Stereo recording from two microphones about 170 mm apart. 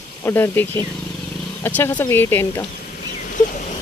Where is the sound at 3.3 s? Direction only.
50° left (ahead or behind).